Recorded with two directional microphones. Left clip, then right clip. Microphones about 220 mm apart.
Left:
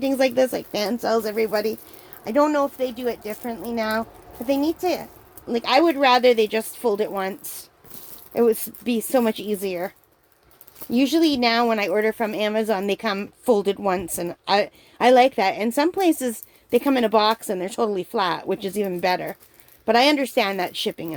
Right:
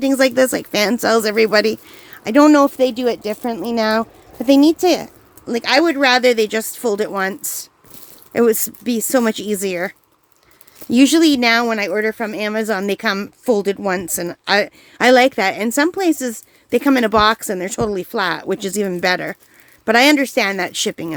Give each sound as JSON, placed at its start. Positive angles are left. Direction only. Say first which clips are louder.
{"t": 0.0, "sound": "speech", "louder": "right 5 dB", "side_deg": -30}
{"t": 5.5, "sound": "speech", "louder": "right 3 dB", "side_deg": -25}
{"t": 10.9, "sound": "speech", "louder": "right 7 dB", "side_deg": -35}